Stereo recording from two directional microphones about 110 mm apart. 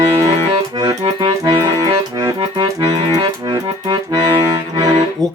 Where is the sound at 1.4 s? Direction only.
35° right (ahead or behind).